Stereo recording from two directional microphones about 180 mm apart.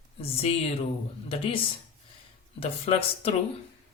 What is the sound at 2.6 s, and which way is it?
Speech, 35° left (ahead or behind).